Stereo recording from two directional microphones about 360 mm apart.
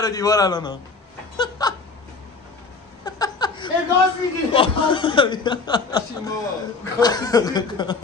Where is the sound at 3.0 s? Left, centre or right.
Centre.